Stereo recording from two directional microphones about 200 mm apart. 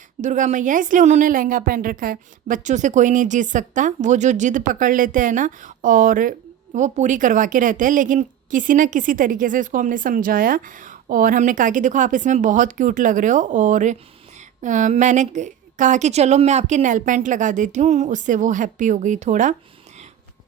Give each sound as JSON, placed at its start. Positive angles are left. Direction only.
{"t": 0.2, "sound": "a woman's voice", "side_deg": -40}